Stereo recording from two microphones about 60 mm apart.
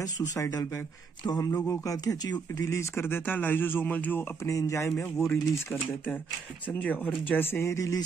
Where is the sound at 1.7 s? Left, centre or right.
Left.